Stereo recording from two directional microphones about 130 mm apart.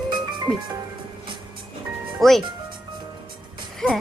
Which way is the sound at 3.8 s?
5° left (ahead or behind).